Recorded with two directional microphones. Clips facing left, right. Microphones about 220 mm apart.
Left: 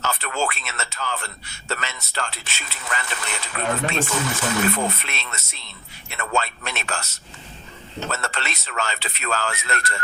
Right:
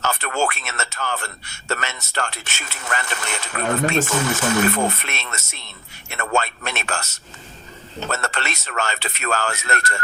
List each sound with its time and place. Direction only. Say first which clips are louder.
0.2 s a man's voice: right 3 dB; 50° right (ahead or behind)
8.1 s a man's voice: right 5 dB; 45° right (ahead or behind)